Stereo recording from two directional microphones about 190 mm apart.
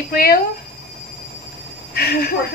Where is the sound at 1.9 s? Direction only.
55° left (ahead or behind).